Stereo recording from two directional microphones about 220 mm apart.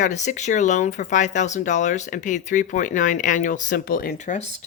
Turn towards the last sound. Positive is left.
turn(degrees=30)  # may be behind; listen again after turning